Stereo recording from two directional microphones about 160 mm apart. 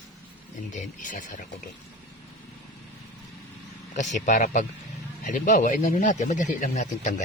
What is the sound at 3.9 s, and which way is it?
Speech, 50° left (ahead or behind).